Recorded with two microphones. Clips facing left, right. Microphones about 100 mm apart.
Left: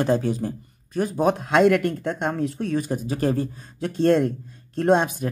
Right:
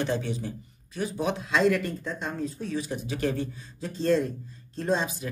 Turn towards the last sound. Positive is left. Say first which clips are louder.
# left 8 dB
turn(degrees=60)  # may be behind; listen again after turning